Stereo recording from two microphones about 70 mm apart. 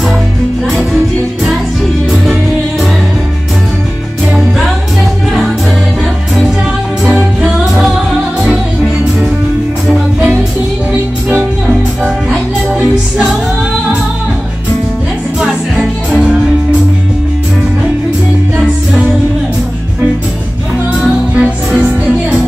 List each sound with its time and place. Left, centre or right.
4.4 s music: centre
7.4 s music: centre
9.8 s music: centre
15.4 s music: centre
21.4 s music: centre